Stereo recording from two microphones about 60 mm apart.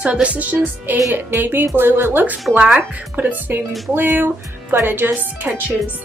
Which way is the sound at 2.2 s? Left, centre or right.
Right.